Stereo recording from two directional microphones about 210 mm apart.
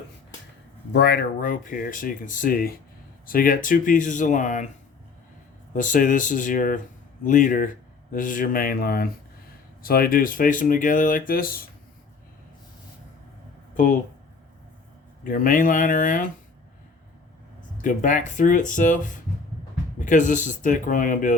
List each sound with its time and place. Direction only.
0.9 s speech: 50° left (ahead or behind)
5.7 s speech: 40° left (ahead or behind)
15.2 s speech: 40° left (ahead or behind)
17.8 s speech: 35° left (ahead or behind)